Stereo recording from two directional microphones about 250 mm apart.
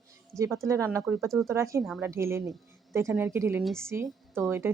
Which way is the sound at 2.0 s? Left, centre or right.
Centre.